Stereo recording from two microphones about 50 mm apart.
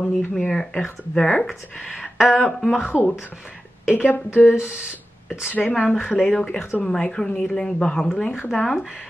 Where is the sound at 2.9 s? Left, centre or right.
Centre.